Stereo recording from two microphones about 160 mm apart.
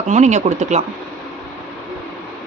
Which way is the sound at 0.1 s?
45° right (ahead or behind).